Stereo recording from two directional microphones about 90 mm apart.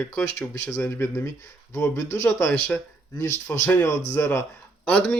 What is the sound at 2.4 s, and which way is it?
Speech, 20° left (ahead or behind).